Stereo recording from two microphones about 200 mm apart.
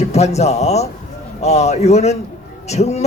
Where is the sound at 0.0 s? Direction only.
35° left (ahead or behind).